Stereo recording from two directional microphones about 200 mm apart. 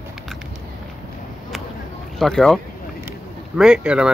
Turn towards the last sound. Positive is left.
turn(degrees=-5)  # may be behind; listen again after turning